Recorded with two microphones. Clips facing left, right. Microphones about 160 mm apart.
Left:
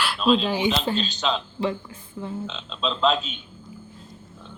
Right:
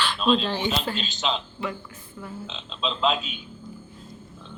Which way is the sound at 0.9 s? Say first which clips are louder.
Left 3 dB; 40° left (ahead or behind).